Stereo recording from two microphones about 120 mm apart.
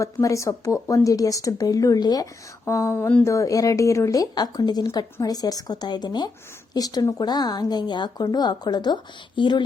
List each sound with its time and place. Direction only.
0.0 s speech: 25° left (ahead or behind)